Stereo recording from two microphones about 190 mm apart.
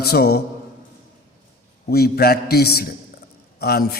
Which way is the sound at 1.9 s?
55° left (ahead or behind).